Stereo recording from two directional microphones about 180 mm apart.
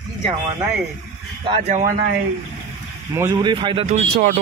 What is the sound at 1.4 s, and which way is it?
Speech, 40° right (ahead or behind).